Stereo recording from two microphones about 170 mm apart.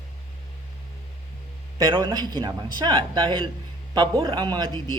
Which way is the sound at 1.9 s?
25° right (ahead or behind).